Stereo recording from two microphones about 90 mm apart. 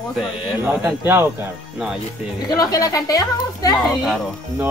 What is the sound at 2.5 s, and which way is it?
A woman's voice, 45° left (ahead or behind).